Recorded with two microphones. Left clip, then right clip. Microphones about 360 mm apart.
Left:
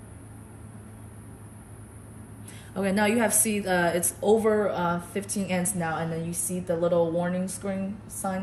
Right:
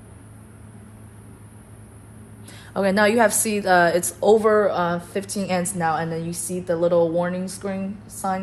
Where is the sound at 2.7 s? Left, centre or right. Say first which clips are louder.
Right 7 dB; centre.